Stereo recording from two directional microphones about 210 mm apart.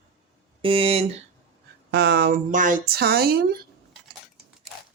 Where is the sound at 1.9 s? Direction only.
50° right (ahead or behind).